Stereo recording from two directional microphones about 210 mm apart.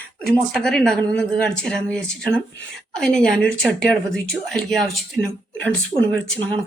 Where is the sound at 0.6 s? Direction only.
5° left (ahead or behind).